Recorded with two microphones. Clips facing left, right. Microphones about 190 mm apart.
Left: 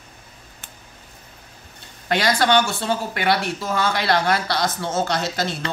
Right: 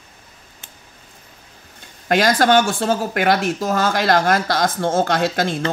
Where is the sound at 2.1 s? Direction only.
45° right (ahead or behind).